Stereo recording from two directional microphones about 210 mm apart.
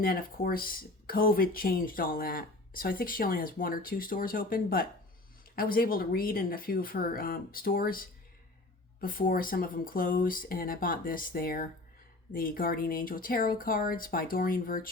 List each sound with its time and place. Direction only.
0.0 s speech: 45° left (ahead or behind)